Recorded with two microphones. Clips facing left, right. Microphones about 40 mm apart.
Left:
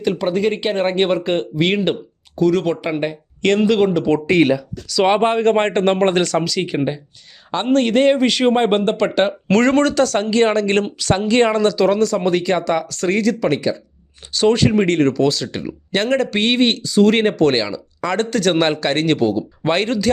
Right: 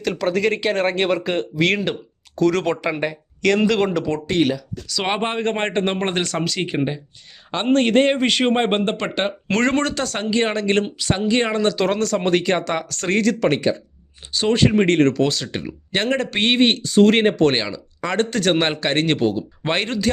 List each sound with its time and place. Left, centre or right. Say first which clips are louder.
0.0 s speech: left 2 dB; centre
2.3 s speech: left 2 dB; centre
5.0 s speech: left 7 dB; centre
6.3 s speech: left 4 dB; right
6.7 s speech: left 2 dB; centre
7.5 s speech: left 1 dB; right
8.4 s speech: left 4 dB; right
11.1 s speech: left 5 dB; centre
11.5 s speech: left 4 dB; right
15.6 s speech: left 2 dB; right